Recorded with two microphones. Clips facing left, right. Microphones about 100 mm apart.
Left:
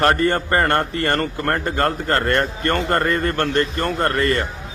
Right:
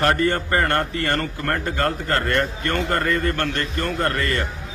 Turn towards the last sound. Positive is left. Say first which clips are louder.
# left 4 dB
turn(degrees=35)  # may be behind; listen again after turning